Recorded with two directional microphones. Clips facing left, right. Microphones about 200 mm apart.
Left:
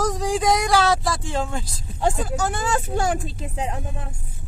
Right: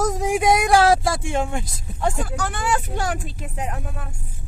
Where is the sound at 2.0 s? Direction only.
25° left (ahead or behind).